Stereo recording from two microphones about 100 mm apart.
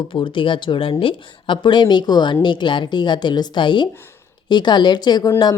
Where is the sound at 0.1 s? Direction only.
55° left (ahead or behind).